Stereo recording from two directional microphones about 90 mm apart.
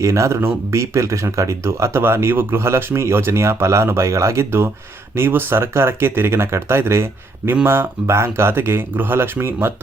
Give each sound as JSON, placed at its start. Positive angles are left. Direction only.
{"t": 0.0, "sound": "speech", "side_deg": -35}